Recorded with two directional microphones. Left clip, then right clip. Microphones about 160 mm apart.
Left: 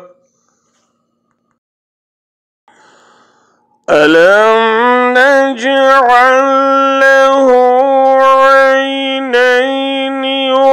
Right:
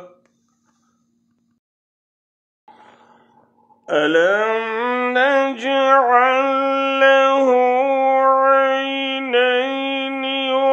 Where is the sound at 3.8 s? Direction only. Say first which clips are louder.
Left 9 dB; 45° left (ahead or behind).